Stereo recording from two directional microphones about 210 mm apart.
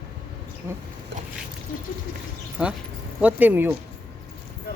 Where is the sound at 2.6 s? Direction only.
5° right (ahead or behind).